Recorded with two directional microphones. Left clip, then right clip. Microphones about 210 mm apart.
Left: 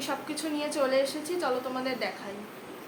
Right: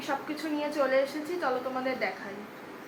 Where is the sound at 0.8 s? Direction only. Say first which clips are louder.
Even; 10° left (ahead or behind).